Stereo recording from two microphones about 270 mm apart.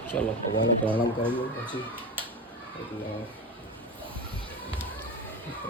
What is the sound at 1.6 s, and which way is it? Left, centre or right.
Speech, centre.